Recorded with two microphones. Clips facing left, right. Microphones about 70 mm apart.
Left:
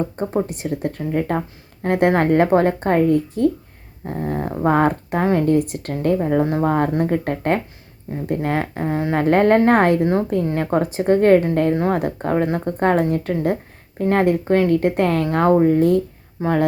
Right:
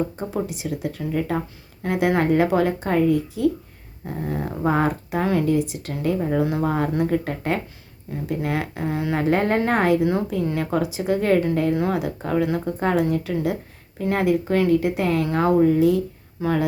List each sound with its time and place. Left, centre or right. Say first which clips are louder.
0.4 s speech: left 3 dB; left
4.0 s speech: left 3 dB; left
6.2 s speech: left 4 dB; left
9.2 s speech: left 7 dB; left
11.7 s speech: left 3 dB; left
16.4 s speech: left 2 dB; left